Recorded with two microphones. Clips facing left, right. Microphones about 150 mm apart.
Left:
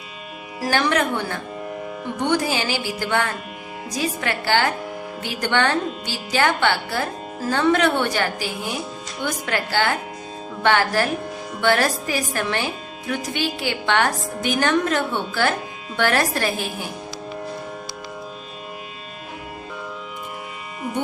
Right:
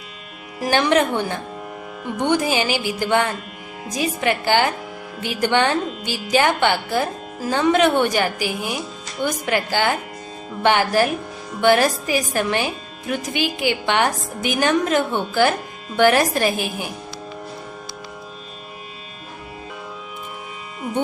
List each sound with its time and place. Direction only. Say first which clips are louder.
0.6 s a woman's voice: right 3 dB; 20° right (ahead or behind)